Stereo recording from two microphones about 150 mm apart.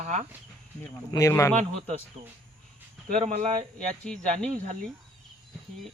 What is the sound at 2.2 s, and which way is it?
Speech, 45° right (ahead or behind).